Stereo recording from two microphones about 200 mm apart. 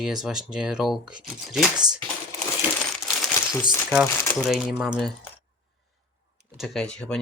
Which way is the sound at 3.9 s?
Centre (ahead or behind).